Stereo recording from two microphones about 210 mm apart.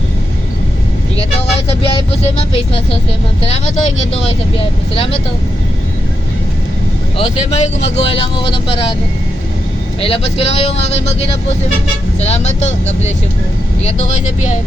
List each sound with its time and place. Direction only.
1.1 s speech: 25° left (ahead or behind)
4.1 s speech: 30° left (ahead or behind)
7.2 s speech: 30° left (ahead or behind)
10.0 s speech: 25° left (ahead or behind)
12.2 s speech: 30° left (ahead or behind)